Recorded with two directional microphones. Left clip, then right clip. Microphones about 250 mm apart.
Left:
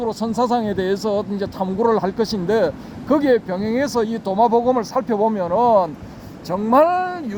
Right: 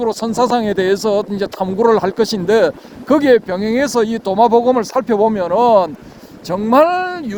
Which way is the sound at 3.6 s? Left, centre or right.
Right.